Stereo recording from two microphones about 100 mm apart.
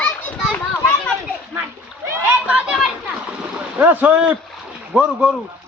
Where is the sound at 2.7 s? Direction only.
5° right (ahead or behind).